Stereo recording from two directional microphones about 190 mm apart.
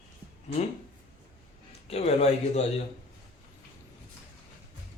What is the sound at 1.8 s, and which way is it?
Speech, 35° left (ahead or behind).